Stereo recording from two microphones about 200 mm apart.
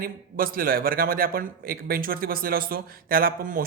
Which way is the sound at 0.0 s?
45° right (ahead or behind).